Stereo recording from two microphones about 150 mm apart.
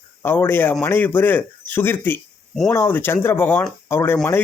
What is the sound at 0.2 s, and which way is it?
Speech, 15° left (ahead or behind).